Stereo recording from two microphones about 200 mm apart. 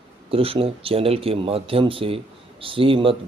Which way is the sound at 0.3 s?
30° right (ahead or behind).